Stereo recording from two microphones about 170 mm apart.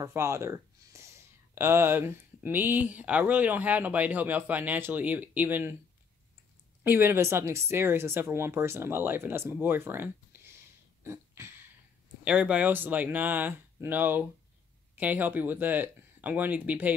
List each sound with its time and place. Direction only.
0.0 s speech: 15° right (ahead or behind)
6.8 s speech: 10° right (ahead or behind)
11.1 s a sound: 15° right (ahead or behind)
12.3 s speech: 5° right (ahead or behind)